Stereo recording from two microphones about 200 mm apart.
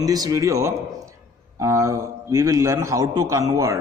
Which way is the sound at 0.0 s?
20° right (ahead or behind).